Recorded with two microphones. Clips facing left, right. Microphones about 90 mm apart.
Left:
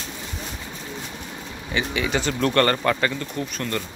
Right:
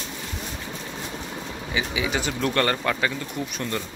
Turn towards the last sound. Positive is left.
turn(degrees=-15)  # may be behind; listen again after turning